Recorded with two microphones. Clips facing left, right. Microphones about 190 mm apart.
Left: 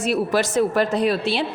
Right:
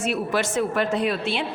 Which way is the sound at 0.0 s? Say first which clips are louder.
Left 4 dB; 35° left (ahead or behind).